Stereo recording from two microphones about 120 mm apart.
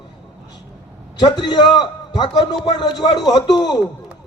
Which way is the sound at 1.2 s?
40° left (ahead or behind).